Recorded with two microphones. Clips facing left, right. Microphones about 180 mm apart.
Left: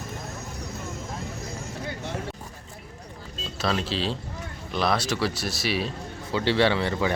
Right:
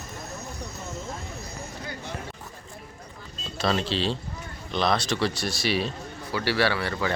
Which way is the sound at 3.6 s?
Centre (ahead or behind).